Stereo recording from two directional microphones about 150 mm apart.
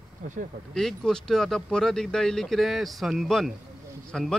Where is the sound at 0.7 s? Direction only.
5° left (ahead or behind).